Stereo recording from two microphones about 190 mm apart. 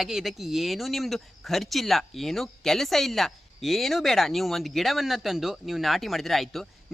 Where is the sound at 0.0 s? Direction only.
Centre (ahead or behind).